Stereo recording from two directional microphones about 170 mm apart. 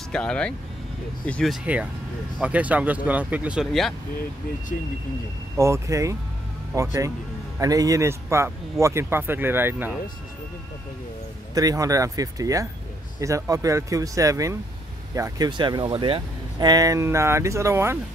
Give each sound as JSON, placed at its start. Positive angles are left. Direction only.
{"t": 0.1, "sound": "speech", "side_deg": 5}
{"t": 5.6, "sound": "speech", "side_deg": -15}
{"t": 11.5, "sound": "speech", "side_deg": -20}